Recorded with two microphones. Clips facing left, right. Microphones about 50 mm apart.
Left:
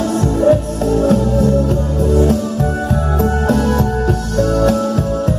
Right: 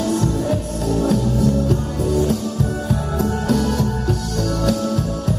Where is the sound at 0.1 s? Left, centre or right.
Left.